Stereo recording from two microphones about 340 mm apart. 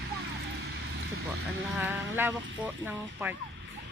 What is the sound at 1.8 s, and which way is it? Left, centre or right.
Speech, centre.